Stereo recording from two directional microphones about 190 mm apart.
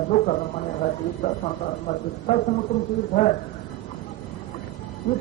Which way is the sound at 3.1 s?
40° left (ahead or behind).